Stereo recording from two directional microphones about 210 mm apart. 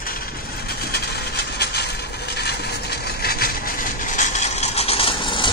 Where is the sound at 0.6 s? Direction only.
50° left (ahead or behind).